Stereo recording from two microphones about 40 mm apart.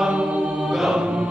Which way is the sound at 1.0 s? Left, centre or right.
Right.